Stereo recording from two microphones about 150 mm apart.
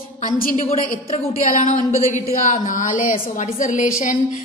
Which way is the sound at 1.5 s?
60° left (ahead or behind).